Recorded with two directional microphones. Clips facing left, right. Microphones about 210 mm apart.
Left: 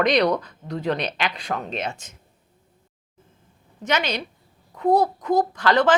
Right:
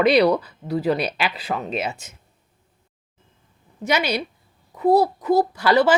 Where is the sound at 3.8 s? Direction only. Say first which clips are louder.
Right 2 dB; 10° right (ahead or behind).